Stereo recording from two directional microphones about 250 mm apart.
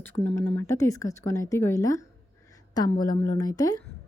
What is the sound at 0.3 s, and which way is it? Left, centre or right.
Speech, centre.